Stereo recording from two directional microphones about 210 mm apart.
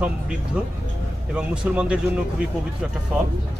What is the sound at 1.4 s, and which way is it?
Speech, 5° right (ahead or behind).